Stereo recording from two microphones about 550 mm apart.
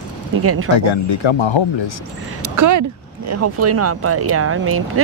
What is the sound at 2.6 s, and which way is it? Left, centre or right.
Speech, right.